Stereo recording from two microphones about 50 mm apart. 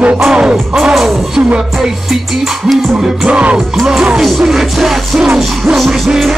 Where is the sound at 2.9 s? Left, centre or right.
Centre.